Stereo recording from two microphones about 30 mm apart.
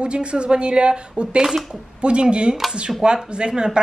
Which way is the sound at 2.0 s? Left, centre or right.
Right.